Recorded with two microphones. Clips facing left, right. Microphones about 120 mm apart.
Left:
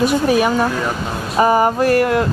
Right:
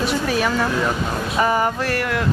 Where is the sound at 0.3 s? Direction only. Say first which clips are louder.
Left 5 dB; 15° left (ahead or behind).